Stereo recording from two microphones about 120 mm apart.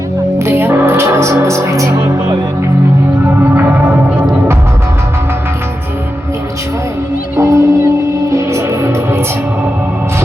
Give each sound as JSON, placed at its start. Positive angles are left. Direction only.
{"t": 0.3, "sound": "music", "side_deg": -20}
{"t": 3.5, "sound": "music", "side_deg": -15}
{"t": 7.3, "sound": "music", "side_deg": -25}